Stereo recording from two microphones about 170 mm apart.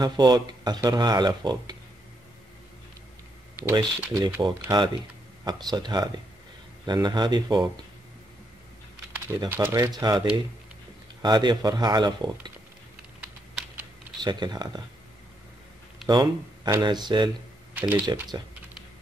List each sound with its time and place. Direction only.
0.0 s speech: 25° right (ahead or behind)
3.7 s speech: 25° right (ahead or behind)
9.3 s speech: 15° right (ahead or behind)
11.2 s speech: 25° right (ahead or behind)
14.2 s speech: 25° right (ahead or behind)
16.1 s speech: 25° right (ahead or behind)
17.7 s speech: 10° right (ahead or behind)
18.3 s speech: 20° right (ahead or behind)